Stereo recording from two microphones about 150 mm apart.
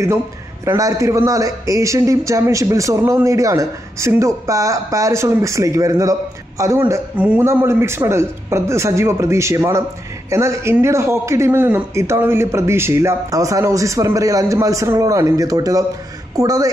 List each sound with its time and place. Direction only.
0.7 s a man's voice: 20° right (ahead or behind)